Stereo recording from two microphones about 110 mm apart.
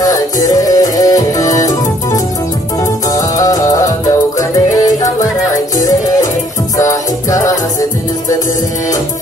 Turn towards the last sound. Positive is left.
turn(degrees=30)  # may be behind; listen again after turning